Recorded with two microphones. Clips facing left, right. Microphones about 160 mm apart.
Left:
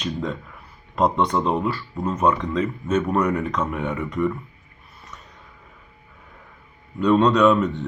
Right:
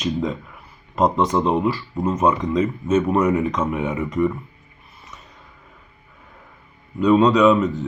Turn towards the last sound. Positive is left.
turn(degrees=0)  # may be behind; listen again after turning